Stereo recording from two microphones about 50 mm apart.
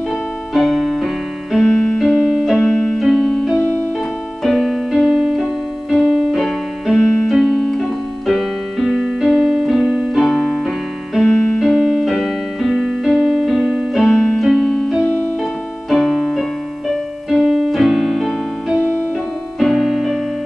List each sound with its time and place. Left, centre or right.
0.7 s keyboard: centre
2.7 s keyboard: centre
14.0 s keyboard: centre
15.9 s keyboard: centre